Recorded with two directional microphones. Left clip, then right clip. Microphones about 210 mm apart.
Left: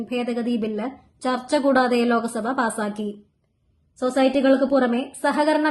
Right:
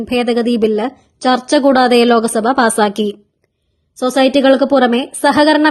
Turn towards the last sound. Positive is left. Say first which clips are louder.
# right 9 dB
turn(degrees=-40)  # may be behind; listen again after turning